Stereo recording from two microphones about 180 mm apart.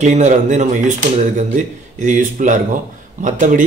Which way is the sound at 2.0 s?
45° right (ahead or behind).